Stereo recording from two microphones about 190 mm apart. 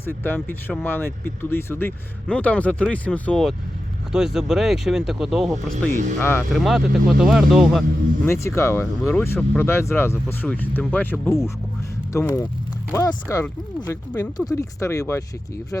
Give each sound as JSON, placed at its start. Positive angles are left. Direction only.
{"t": 0.0, "sound": "speech", "side_deg": 10}
{"t": 5.9, "sound": "speech", "side_deg": -40}
{"t": 6.1, "sound": "speech", "side_deg": 10}
{"t": 6.5, "sound": "speech", "side_deg": 0}
{"t": 8.2, "sound": "speech", "side_deg": 15}